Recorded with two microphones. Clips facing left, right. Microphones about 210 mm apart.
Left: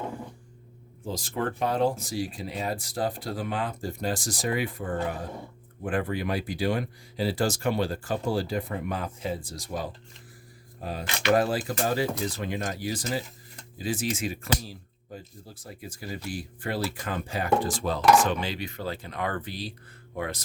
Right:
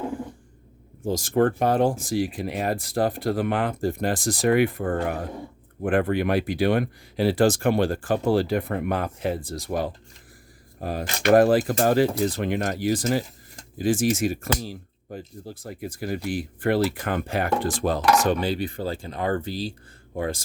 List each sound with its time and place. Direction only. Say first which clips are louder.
1.0 s speech: right 9 dB; 45° right (ahead or behind)
10.8 s speech: right 5 dB; 50° right (ahead or behind)
15.1 s speech: right 7 dB; 60° right (ahead or behind); by 20.4 s 30° right (ahead or behind)